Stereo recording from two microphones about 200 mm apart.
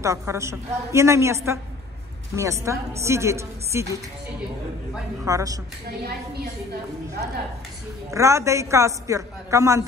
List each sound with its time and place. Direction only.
0.0 s a woman's voice: 15° right (ahead or behind)
5.2 s a woman's voice: 15° right (ahead or behind)
8.1 s a woman's voice: 15° right (ahead or behind)